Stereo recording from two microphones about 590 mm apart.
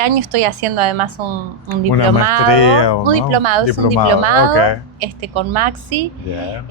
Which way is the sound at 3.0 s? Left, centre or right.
Right.